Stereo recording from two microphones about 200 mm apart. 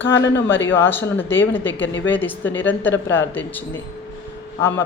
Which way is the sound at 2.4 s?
70° left (ahead or behind).